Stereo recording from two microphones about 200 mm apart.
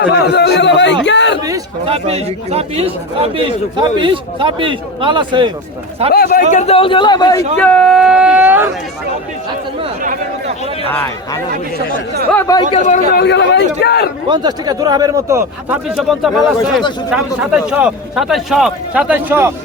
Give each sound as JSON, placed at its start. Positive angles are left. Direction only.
{"t": 0.0, "sound": "a man's voice", "side_deg": 60}
{"t": 1.8, "sound": "a man's voice", "side_deg": -30}
{"t": 6.5, "sound": "a man's voice", "side_deg": 35}
{"t": 7.6, "sound": "speech", "side_deg": 5}
{"t": 12.3, "sound": "speech", "side_deg": 15}
{"t": 12.7, "sound": "a man's voice", "side_deg": 40}
{"t": 14.3, "sound": "a man's voice", "side_deg": -20}
{"t": 16.0, "sound": "a man's voice", "side_deg": 0}